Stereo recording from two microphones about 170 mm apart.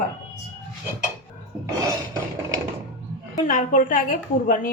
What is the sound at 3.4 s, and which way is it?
Speech, 50° left (ahead or behind).